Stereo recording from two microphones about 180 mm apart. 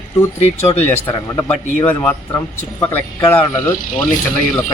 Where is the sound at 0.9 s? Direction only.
10° left (ahead or behind).